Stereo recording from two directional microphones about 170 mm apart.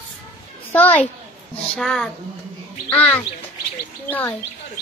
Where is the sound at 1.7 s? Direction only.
Centre (ahead or behind).